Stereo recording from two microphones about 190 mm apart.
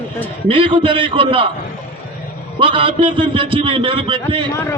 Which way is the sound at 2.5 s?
25° right (ahead or behind).